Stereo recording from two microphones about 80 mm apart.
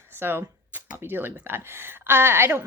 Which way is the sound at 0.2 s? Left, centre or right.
Right.